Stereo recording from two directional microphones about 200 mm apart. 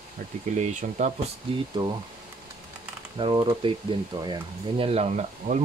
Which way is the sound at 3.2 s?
25° right (ahead or behind).